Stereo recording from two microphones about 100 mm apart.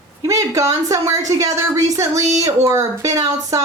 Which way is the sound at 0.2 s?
30° right (ahead or behind).